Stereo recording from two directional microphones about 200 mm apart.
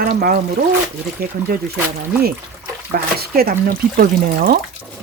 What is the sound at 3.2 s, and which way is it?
Speech, 50° right (ahead or behind).